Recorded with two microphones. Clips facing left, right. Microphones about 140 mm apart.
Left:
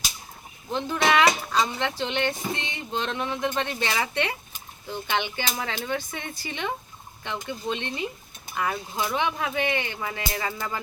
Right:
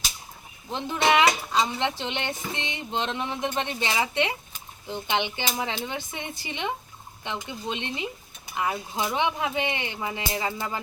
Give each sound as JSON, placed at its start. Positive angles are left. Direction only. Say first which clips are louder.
{"t": 0.7, "sound": "speech", "louder": "even", "side_deg": -20}